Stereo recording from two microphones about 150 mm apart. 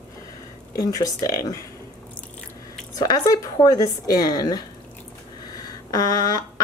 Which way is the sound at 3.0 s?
25° left (ahead or behind).